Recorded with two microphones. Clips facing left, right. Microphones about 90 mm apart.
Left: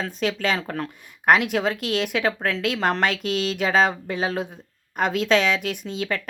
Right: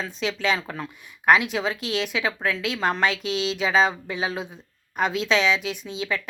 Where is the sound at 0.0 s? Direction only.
50° left (ahead or behind).